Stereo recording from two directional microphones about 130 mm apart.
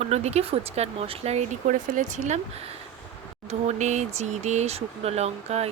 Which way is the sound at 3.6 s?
65° right (ahead or behind).